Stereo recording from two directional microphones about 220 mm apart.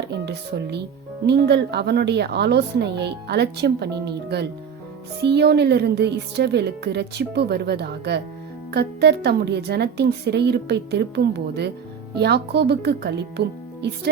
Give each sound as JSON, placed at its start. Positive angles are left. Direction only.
{"t": 0.1, "sound": "a woman's voice", "side_deg": -50}